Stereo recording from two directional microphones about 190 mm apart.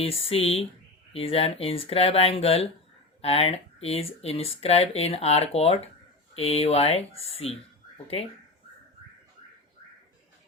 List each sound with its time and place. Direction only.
0.0 s speech: 30° left (ahead or behind)